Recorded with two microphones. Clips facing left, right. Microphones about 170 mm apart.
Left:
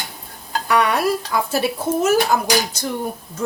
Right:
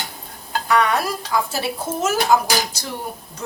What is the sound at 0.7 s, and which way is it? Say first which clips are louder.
Stir: even; 60° left (ahead or behind).